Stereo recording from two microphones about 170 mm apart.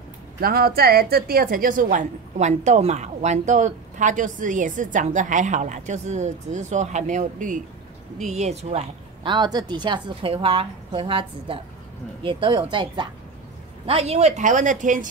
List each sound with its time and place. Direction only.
0.4 s a woman's voice: 60° right (ahead or behind)